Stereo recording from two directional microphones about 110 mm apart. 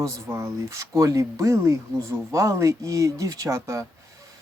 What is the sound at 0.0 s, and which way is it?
Speech, 25° right (ahead or behind).